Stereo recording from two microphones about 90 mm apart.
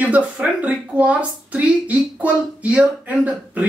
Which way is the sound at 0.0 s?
15° right (ahead or behind).